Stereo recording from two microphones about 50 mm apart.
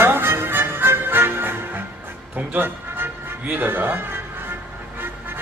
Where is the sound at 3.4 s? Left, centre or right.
Right.